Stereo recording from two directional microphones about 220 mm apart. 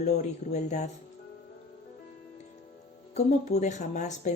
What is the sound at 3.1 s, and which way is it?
Speech, 30° left (ahead or behind).